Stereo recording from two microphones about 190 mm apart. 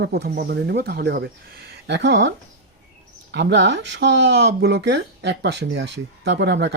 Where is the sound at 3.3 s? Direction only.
65° right (ahead or behind).